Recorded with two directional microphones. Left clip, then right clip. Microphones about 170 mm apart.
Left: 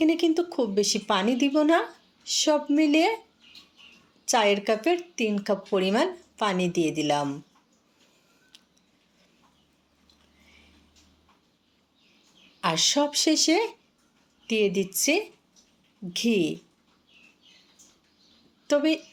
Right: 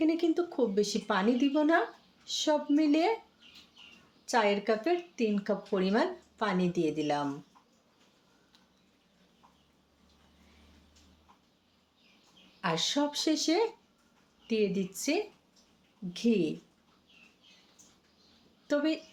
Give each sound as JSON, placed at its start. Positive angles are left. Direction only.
{"t": 0.0, "sound": "speech", "side_deg": 15}
{"t": 4.3, "sound": "speech", "side_deg": 20}
{"t": 12.5, "sound": "speech", "side_deg": 20}
{"t": 18.7, "sound": "speech", "side_deg": 20}